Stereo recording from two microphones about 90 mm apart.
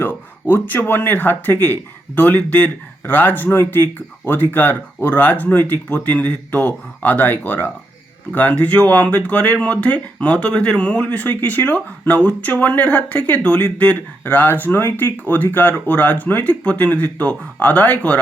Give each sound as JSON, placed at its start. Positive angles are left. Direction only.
{"t": 0.0, "sound": "speech", "side_deg": 25}